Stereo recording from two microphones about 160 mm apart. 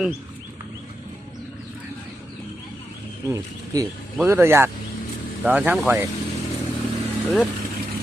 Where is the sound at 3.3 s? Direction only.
20° right (ahead or behind).